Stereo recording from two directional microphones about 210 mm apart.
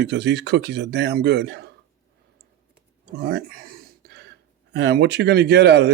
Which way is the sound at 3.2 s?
50° right (ahead or behind).